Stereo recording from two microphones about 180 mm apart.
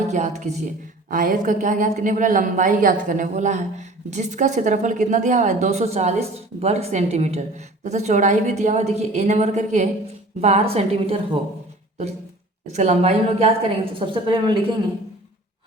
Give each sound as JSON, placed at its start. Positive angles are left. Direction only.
{"t": 0.1, "sound": "a woman's voice", "side_deg": -40}
{"t": 12.7, "sound": "a woman's voice", "side_deg": -40}